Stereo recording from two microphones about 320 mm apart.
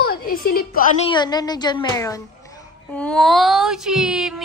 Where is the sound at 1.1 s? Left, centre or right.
Centre.